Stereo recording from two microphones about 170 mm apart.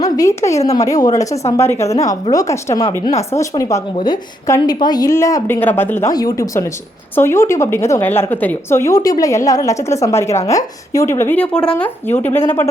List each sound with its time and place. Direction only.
0.0 s a woman's voice: 20° left (ahead or behind)